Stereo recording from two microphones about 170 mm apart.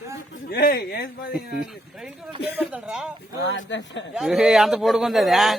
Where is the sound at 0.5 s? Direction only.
70° left (ahead or behind).